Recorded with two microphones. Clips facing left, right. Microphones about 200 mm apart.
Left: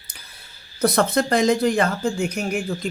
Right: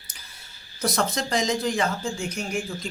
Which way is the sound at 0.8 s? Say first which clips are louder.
Left 7 dB; 60° left (ahead or behind).